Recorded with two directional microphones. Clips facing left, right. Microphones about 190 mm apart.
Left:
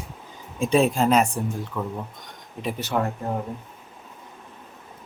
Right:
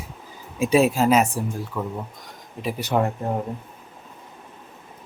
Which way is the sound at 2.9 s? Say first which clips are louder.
Right 3 dB; 20° right (ahead or behind).